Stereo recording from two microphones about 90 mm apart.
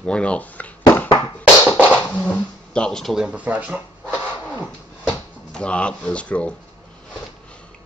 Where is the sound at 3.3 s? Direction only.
15° right (ahead or behind).